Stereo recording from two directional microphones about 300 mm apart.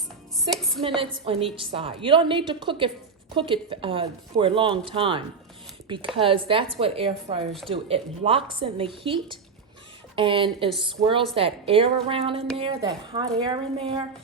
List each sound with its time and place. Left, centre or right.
0.3 s music: centre
0.8 s speech: centre